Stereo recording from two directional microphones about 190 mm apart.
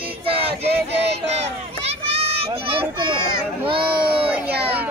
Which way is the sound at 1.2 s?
35° right (ahead or behind).